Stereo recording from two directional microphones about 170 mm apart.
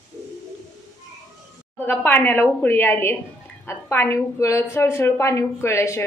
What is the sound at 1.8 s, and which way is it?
A woman's voice, 10° left (ahead or behind).